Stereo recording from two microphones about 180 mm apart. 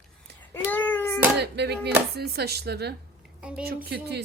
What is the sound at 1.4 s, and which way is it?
A woman's voice, 65° right (ahead or behind).